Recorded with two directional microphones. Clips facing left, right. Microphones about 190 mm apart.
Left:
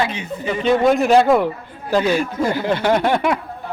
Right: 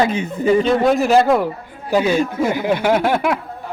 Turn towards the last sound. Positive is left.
turn(degrees=-5)  # may be behind; listen again after turning